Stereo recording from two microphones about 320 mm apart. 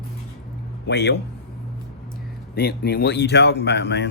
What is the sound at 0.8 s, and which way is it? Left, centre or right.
Speech, left.